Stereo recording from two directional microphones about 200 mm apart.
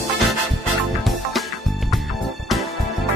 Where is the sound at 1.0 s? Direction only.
Centre (ahead or behind).